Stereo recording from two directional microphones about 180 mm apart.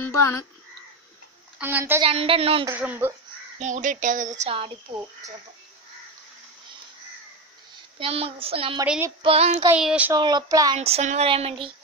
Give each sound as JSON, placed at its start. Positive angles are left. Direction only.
{"t": 0.0, "sound": "speech", "side_deg": 15}
{"t": 1.6, "sound": "speech", "side_deg": -10}
{"t": 2.0, "sound": "speech", "side_deg": -30}
{"t": 2.7, "sound": "speech", "side_deg": -10}
{"t": 3.5, "sound": "speech", "side_deg": -45}
{"t": 8.0, "sound": "speech", "side_deg": -30}
{"t": 8.8, "sound": "child singing", "side_deg": -5}
{"t": 9.2, "sound": "speech", "side_deg": -35}
{"t": 9.7, "sound": "speech", "side_deg": -5}
{"t": 10.1, "sound": "speech", "side_deg": -20}
{"t": 10.8, "sound": "speech", "side_deg": -35}